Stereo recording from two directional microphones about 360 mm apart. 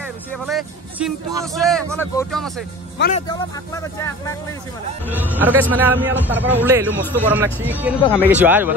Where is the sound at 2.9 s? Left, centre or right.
Left.